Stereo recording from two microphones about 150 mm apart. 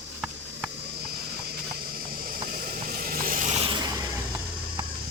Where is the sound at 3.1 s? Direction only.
70° right (ahead or behind).